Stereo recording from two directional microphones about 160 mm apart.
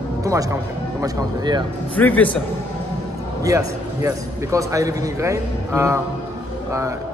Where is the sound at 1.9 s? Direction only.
10° left (ahead or behind).